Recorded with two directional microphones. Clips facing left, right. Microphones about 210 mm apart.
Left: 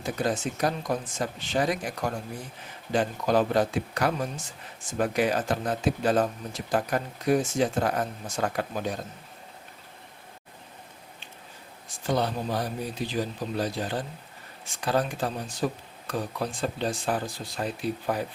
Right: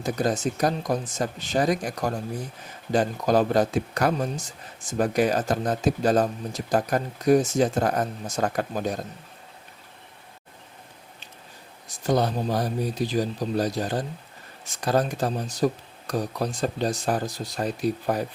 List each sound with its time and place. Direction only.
0.0 s speech: 40° right (ahead or behind)
11.9 s speech: 40° right (ahead or behind)